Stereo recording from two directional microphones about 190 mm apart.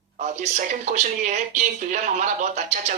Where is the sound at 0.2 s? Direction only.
40° right (ahead or behind).